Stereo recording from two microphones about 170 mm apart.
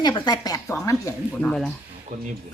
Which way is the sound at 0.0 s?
25° left (ahead or behind).